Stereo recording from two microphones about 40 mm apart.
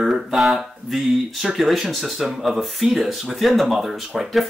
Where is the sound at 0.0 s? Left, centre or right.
Centre.